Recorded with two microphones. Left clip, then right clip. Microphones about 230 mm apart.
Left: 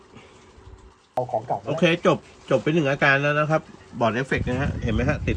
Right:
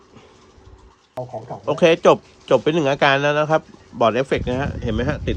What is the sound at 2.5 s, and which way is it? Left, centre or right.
Speech, centre.